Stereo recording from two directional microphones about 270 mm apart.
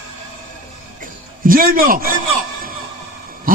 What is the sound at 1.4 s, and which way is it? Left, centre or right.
Speech, right.